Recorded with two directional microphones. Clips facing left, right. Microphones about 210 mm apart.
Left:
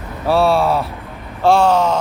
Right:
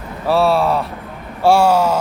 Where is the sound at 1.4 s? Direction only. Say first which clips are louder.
Even; 10° right (ahead or behind).